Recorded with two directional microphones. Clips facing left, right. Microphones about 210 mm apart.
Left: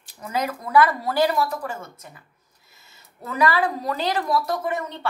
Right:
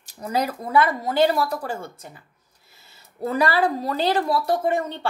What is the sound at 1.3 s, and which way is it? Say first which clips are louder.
Speech: right 1 dB; 35° right (ahead or behind).